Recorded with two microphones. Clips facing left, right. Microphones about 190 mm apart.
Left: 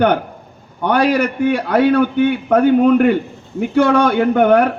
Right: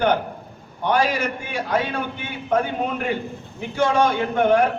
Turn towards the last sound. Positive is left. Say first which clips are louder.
# left 6 dB
turn(degrees=65)  # may be behind; listen again after turning